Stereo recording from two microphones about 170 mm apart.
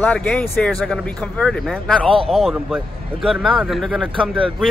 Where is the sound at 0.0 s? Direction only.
5° left (ahead or behind).